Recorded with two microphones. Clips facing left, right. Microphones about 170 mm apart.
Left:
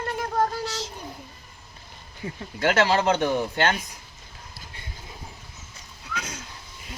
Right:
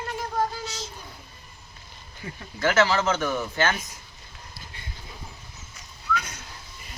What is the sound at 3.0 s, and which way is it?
Speech, 30° left (ahead or behind).